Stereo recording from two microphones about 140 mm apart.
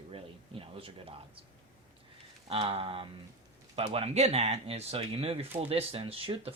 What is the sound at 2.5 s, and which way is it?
Speech, 40° right (ahead or behind).